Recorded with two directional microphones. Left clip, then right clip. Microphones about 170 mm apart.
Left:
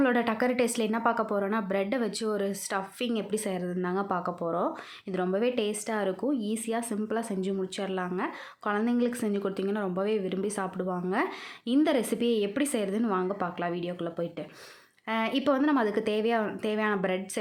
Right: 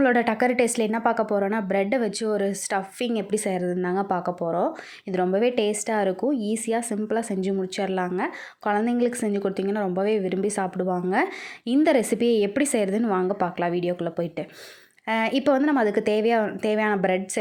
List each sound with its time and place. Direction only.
0.0 s a woman's voice: 25° right (ahead or behind)